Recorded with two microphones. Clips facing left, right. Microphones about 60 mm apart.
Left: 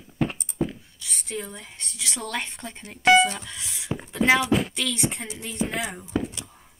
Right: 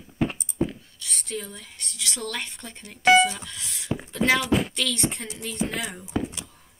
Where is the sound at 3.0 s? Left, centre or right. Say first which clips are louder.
Even; centre.